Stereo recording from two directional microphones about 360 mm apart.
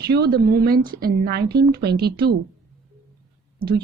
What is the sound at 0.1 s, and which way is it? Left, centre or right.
A woman's voice, right.